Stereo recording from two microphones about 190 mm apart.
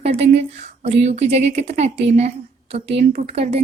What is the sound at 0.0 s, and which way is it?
A woman's voice, 35° right (ahead or behind).